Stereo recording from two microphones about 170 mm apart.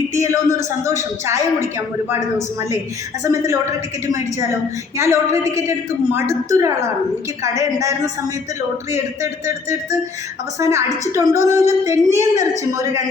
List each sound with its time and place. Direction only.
0.1 s a woman's voice: 20° right (ahead or behind)
3.2 s a woman's voice: 15° right (ahead or behind)
10.6 s a woman's voice: 15° right (ahead or behind)